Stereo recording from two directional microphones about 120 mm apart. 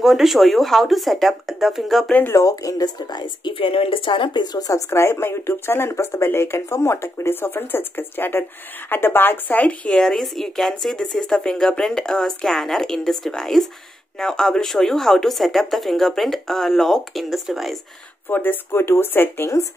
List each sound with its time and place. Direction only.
0.0 s speech: centre (ahead or behind)
2.1 s speech: 15° left (ahead or behind)
2.4 s speech: 30° left (ahead or behind); by 17.7 s centre (ahead or behind)
18.3 s speech: 15° left (ahead or behind)